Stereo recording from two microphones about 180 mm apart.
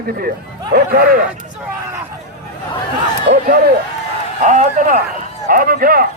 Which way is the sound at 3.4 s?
50° right (ahead or behind).